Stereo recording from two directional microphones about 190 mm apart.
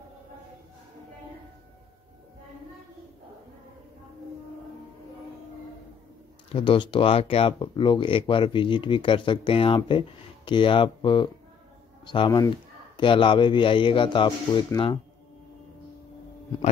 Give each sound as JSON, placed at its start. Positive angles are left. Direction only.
{"t": 6.5, "sound": "speech", "side_deg": 25}